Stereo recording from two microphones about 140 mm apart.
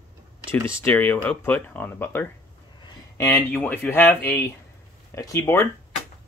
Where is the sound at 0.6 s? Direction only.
15° left (ahead or behind).